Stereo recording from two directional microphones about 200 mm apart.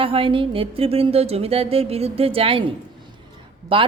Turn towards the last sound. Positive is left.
turn(degrees=-25)  # may be behind; listen again after turning